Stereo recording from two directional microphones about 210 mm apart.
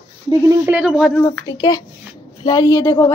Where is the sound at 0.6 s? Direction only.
5° right (ahead or behind).